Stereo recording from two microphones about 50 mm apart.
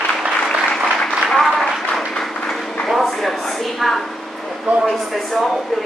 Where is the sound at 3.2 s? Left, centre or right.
Centre.